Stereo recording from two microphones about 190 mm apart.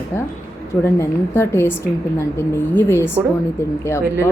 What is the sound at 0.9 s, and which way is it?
Speech, 10° left (ahead or behind).